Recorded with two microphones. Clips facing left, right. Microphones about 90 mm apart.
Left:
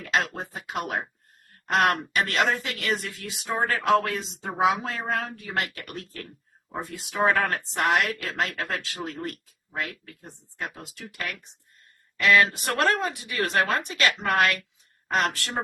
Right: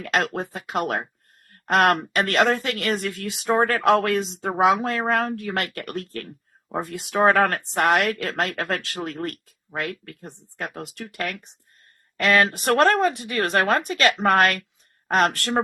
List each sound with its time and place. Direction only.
0.0 s speech: 60° right (ahead or behind)